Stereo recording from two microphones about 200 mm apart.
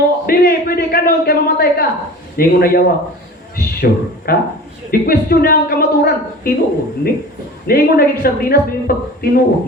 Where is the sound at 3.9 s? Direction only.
50° left (ahead or behind).